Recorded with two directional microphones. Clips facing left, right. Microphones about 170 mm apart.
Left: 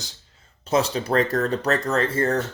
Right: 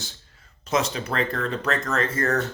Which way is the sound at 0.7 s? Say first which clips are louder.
Left 4 dB; 30° left (ahead or behind).